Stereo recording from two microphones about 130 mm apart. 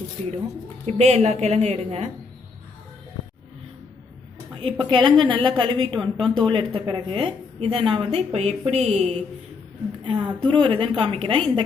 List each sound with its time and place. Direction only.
0.9 s speech: 55° right (ahead or behind)
4.6 s a woman's voice: 40° right (ahead or behind)
6.1 s speech: 5° left (ahead or behind)
6.4 s a woman's voice: 40° right (ahead or behind); by 9.2 s 55° right (ahead or behind)
10.0 s a woman's voice: 35° right (ahead or behind)